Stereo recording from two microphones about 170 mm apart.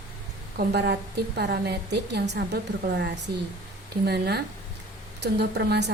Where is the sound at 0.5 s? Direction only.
75° right (ahead or behind).